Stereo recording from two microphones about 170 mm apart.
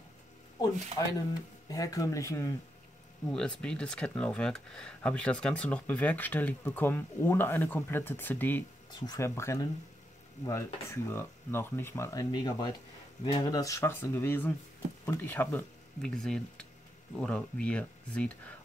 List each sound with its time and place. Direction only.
1.7 s speech: 20° left (ahead or behind)
3.3 s speech: 5° left (ahead or behind)
8.9 s speech: 20° left (ahead or behind); by 18.3 s 5° left (ahead or behind)